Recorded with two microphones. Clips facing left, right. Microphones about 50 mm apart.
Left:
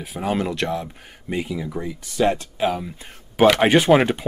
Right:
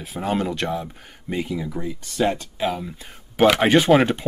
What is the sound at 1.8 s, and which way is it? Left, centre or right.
Speech, left.